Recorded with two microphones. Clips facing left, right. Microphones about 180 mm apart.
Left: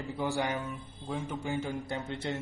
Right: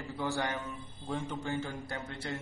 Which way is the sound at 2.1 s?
25° left (ahead or behind).